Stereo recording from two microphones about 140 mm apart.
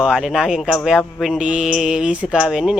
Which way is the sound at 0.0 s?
5° right (ahead or behind).